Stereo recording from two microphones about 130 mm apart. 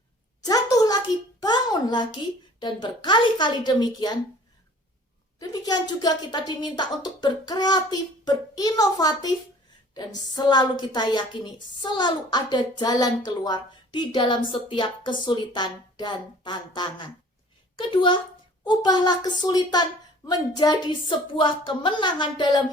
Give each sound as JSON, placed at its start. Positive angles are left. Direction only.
{"t": 0.4, "sound": "a child's voice", "side_deg": 30}
{"t": 5.4, "sound": "a woman's voice", "side_deg": 30}